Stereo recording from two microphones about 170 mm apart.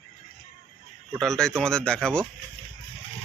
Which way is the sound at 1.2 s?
5° left (ahead or behind).